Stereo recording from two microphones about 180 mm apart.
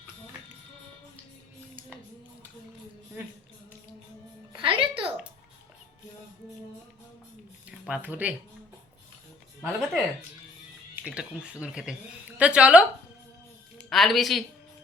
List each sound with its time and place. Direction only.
4.5 s music: 30° right (ahead or behind)
7.9 s speech: 5° right (ahead or behind)
9.6 s speech: centre (ahead or behind)
11.0 s speech: 5° right (ahead or behind)
13.9 s speech: centre (ahead or behind)